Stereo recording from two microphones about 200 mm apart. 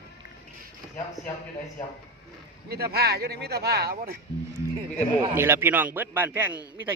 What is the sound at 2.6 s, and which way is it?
Speech, 50° right (ahead or behind).